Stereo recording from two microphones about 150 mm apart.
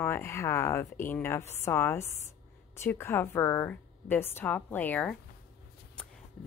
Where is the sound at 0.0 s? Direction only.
15° left (ahead or behind).